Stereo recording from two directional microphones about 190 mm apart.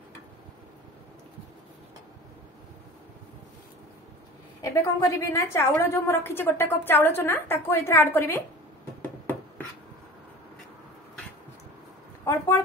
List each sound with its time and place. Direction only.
4.6 s a woman's voice: 15° left (ahead or behind)
12.3 s a woman's voice: 15° left (ahead or behind)